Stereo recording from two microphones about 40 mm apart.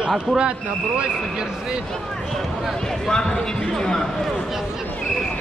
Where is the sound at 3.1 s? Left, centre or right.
Centre.